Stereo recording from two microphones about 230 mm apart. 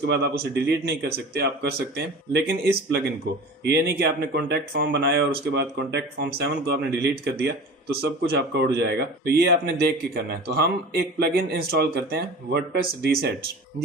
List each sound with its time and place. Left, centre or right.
0.0 s speech: right